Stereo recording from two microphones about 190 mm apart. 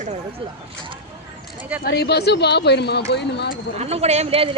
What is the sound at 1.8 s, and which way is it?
Speech, 55° left (ahead or behind).